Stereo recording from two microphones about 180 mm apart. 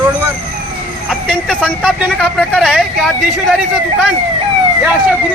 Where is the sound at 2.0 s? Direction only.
5° right (ahead or behind).